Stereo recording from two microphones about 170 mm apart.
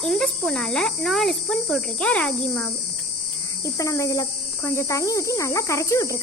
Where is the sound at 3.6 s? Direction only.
20° left (ahead or behind).